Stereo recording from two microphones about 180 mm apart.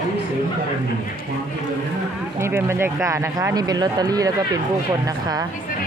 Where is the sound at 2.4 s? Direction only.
15° right (ahead or behind).